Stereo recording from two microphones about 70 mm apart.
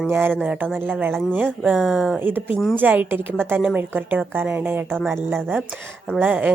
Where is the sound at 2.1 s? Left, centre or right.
Right.